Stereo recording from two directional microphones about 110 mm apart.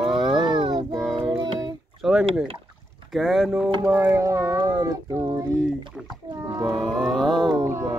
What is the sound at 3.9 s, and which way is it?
Speech, 15° right (ahead or behind).